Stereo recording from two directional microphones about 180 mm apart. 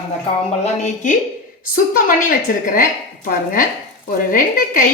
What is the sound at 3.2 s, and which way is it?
Speech, 50° left (ahead or behind).